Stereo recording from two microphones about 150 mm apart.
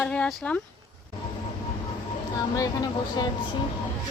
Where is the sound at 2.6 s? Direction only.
25° left (ahead or behind).